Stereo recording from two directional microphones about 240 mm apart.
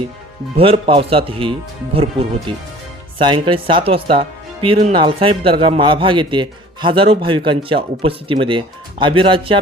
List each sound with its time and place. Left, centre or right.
0.5 s speech: right